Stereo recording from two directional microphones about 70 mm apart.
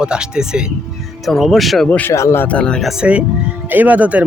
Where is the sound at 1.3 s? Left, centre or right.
Centre.